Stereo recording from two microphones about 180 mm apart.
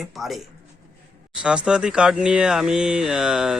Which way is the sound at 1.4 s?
5° right (ahead or behind).